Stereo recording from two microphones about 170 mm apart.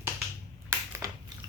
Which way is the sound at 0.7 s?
20° right (ahead or behind).